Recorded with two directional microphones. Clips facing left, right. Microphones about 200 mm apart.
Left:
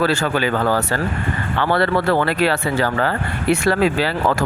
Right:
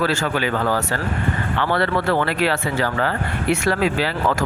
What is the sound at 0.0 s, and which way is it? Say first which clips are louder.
Speech: left 2 dB; 35° left (ahead or behind).